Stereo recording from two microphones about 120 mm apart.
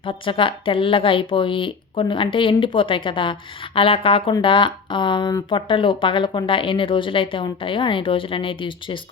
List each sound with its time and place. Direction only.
0.0 s speech: 45° left (ahead or behind)